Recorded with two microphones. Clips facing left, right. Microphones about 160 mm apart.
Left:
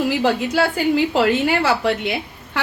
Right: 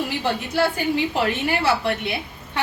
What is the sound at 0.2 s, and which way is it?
A woman's voice, 90° left.